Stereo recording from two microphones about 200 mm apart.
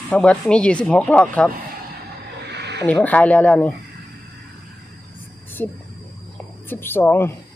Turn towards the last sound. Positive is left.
turn(degrees=10)  # may be behind; listen again after turning